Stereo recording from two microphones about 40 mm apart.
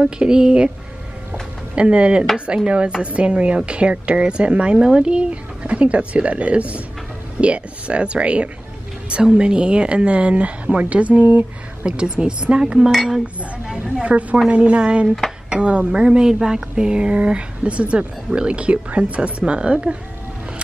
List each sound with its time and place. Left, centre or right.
0.0 s speech: right
1.8 s speech: right
11.8 s speech: right
14.0 s a woman's voice: right